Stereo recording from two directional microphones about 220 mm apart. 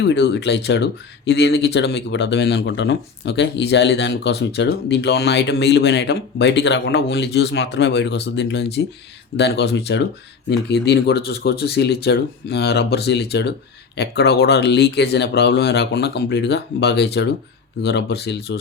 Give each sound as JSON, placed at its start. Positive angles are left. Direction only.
{"t": 0.0, "sound": "speech", "side_deg": 50}